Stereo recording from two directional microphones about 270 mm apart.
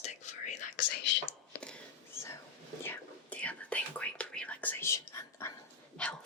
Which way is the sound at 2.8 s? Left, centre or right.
Centre.